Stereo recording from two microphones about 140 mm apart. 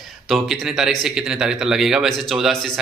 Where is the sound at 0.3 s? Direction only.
Centre (ahead or behind).